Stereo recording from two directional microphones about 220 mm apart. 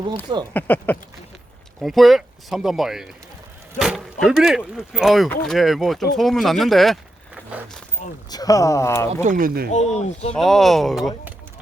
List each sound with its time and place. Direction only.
0.1 s speech: 20° right (ahead or behind)
0.5 s speech: 10° left (ahead or behind)
8.3 s speech: 15° left (ahead or behind)
9.2 s speech: 40° right (ahead or behind)
10.1 s speech: 30° left (ahead or behind)
10.3 s speech: centre (ahead or behind)